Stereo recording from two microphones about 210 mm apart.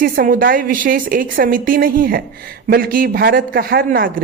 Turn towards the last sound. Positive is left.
turn(degrees=-45)  # may be behind; listen again after turning